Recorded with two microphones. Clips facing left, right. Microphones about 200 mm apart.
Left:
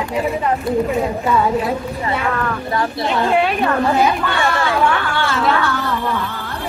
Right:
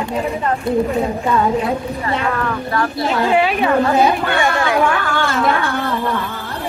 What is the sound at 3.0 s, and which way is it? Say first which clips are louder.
Speech: right 1 dB; centre (ahead or behind).